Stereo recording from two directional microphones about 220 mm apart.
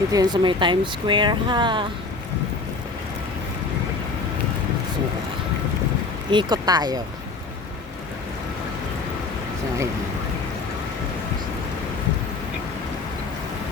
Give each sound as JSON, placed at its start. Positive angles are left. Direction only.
{"t": 0.1, "sound": "speech", "side_deg": -15}
{"t": 6.3, "sound": "speech", "side_deg": -20}